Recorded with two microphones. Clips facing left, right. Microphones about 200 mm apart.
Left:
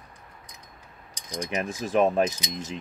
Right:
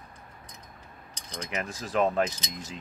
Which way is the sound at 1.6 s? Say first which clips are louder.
Left 4 dB; 25° left (ahead or behind).